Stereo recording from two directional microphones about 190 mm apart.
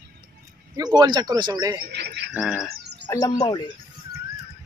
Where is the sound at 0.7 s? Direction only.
20° right (ahead or behind).